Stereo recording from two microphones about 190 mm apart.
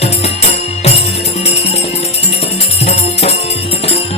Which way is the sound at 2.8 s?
35° left (ahead or behind).